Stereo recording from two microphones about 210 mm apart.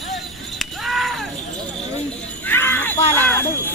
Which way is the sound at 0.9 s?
Centre (ahead or behind).